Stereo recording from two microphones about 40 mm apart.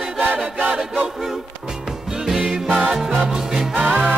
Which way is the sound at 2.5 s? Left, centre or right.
Centre.